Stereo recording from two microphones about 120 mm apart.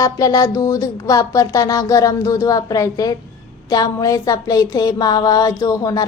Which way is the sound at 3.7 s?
30° left (ahead or behind).